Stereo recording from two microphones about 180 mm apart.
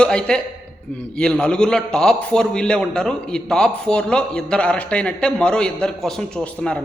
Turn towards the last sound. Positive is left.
turn(degrees=5)  # may be behind; listen again after turning